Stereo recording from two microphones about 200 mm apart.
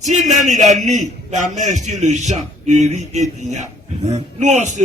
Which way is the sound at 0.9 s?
35° right (ahead or behind).